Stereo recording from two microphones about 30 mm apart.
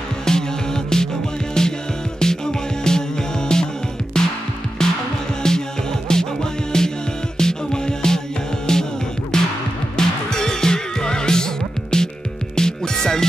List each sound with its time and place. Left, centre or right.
0.2 s music: left